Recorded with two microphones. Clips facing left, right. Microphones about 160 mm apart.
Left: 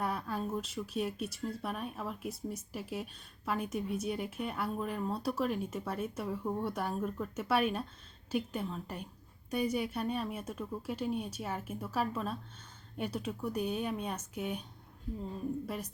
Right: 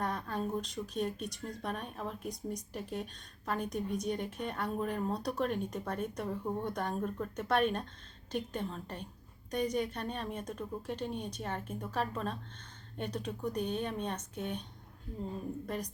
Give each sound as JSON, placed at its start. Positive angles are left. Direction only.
{"t": 0.0, "sound": "a woman's voice", "side_deg": 5}
{"t": 15.6, "sound": "a woman's voice", "side_deg": 5}